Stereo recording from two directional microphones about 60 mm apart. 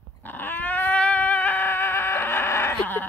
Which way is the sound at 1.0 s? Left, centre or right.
Left.